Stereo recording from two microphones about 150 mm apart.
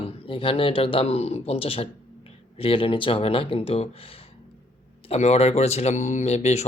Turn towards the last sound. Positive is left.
turn(degrees=45)  # may be behind; listen again after turning